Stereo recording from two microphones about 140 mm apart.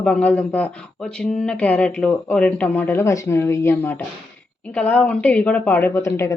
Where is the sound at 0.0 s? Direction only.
10° left (ahead or behind).